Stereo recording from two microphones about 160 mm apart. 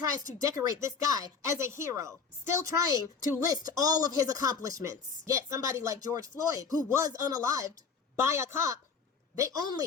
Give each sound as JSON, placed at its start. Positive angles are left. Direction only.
{"t": 0.0, "sound": "a woman's voice", "side_deg": -20}